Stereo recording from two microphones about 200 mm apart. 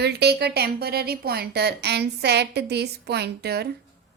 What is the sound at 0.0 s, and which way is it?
Speech, 55° right (ahead or behind).